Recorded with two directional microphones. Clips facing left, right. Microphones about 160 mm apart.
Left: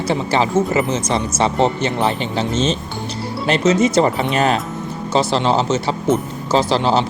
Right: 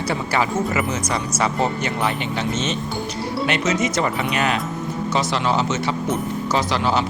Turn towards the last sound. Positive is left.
turn(degrees=30)  # may be behind; listen again after turning